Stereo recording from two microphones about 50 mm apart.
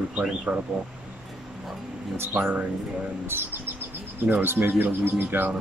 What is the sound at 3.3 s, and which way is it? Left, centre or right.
Speech, right.